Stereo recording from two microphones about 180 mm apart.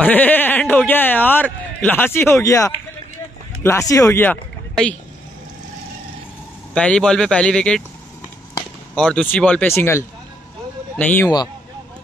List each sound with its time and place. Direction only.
0.0 s speech: 10° left (ahead or behind)
6.7 s speech: 5° left (ahead or behind)
8.9 s speech: 5° left (ahead or behind)